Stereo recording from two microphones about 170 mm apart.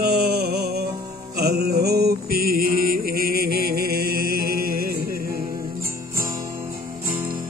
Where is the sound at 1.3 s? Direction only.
65° right (ahead or behind).